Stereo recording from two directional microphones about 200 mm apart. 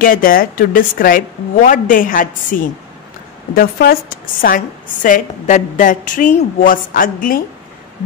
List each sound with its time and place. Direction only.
0.0 s a woman's voice: 45° left (ahead or behind)